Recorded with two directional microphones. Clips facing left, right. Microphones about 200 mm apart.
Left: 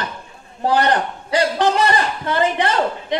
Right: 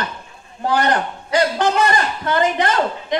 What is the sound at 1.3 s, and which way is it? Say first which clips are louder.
A man's voice: even; 30° left (ahead or behind).